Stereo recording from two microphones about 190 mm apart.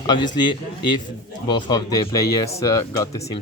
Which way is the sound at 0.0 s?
20° left (ahead or behind).